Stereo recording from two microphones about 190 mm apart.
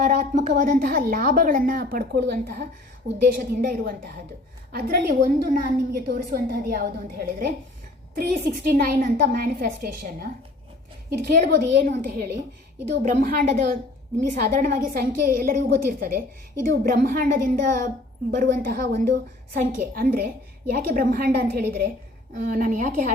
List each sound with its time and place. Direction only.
0.0 s a woman's voice: 40° right (ahead or behind)
11.6 s a woman's voice: 50° right (ahead or behind)